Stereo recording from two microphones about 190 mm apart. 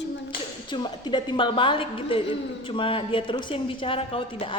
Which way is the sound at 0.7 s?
25° left (ahead or behind).